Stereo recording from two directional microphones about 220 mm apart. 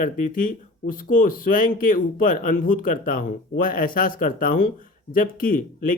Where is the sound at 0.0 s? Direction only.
35° left (ahead or behind).